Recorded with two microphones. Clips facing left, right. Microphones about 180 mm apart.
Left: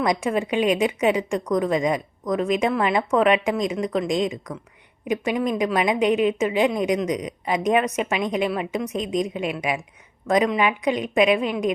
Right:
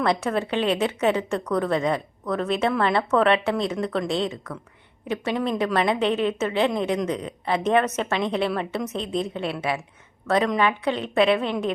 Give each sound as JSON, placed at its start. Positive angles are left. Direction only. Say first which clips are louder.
{"t": 0.0, "sound": "a woman's voice", "louder": "left 1 dB", "side_deg": 10}